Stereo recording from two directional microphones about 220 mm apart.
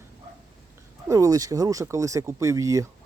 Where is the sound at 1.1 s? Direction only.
15° right (ahead or behind).